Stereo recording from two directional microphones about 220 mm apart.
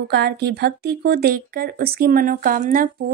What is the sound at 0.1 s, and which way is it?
Speech, 45° right (ahead or behind).